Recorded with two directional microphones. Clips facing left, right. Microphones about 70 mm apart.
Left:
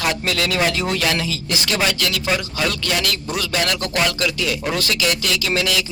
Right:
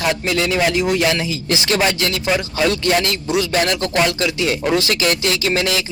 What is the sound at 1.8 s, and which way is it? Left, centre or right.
A man's voice, right.